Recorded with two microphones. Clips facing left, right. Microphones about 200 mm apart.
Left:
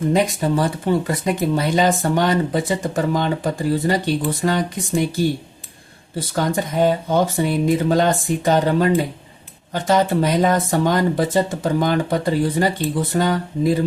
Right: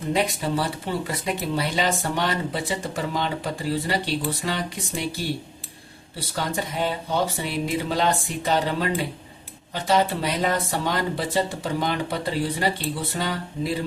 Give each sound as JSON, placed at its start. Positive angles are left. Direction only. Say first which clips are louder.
{"t": 0.1, "sound": "speech", "louder": "left 3 dB", "side_deg": 45}